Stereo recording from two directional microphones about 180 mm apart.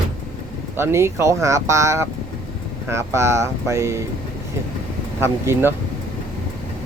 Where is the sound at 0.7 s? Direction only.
15° right (ahead or behind).